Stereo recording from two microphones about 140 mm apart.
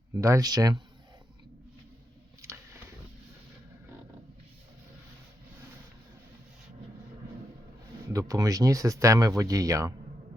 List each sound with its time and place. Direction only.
0.1 s speech: 20° right (ahead or behind)
2.4 s a sound: 20° right (ahead or behind)
8.1 s speech: 25° right (ahead or behind)